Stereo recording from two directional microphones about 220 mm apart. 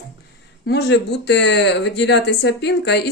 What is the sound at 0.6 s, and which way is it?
Speech, 50° left (ahead or behind).